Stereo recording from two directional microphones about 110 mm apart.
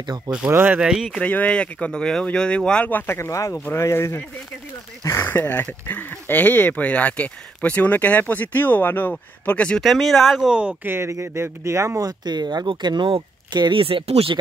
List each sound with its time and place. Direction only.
0.5 s speech: 15° right (ahead or behind)
1.2 s speech: 15° left (ahead or behind); by 10.7 s 5° right (ahead or behind)
10.8 s speech: 20° right (ahead or behind); by 14.3 s 60° right (ahead or behind)